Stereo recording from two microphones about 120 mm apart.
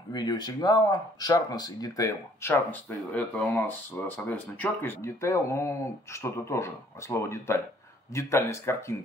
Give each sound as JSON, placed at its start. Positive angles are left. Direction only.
{"t": 0.1, "sound": "speech", "side_deg": 35}
{"t": 2.4, "sound": "speech", "side_deg": 15}